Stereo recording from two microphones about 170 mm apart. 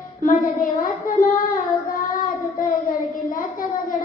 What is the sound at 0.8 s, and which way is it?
Child singing, 50° left (ahead or behind).